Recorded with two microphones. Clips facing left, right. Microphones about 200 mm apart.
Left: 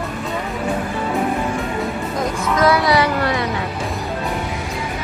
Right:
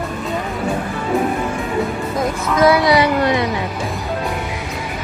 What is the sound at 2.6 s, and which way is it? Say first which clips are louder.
Speech: right 3 dB; 15° right (ahead or behind).